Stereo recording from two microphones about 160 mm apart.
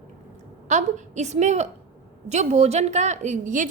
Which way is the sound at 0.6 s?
45° right (ahead or behind).